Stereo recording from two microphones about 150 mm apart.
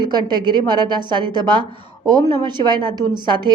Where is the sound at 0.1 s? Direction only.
30° right (ahead or behind).